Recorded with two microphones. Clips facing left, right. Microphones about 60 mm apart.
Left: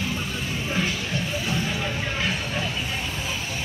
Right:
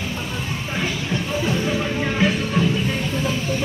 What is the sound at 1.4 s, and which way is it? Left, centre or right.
Music, centre.